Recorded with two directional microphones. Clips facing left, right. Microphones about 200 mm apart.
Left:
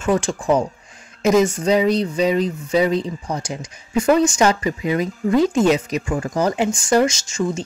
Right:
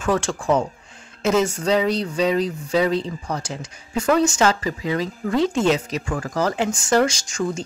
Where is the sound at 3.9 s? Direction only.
10° left (ahead or behind).